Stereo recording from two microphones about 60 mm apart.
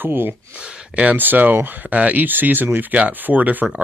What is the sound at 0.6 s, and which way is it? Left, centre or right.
Speech, centre.